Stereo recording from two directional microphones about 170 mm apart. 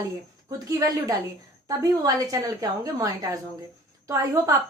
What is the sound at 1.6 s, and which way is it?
A woman's voice, 20° right (ahead or behind).